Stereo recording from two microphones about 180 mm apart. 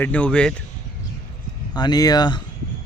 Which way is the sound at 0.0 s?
5° left (ahead or behind).